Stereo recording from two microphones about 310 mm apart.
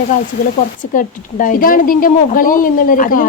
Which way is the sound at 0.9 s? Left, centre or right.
Left.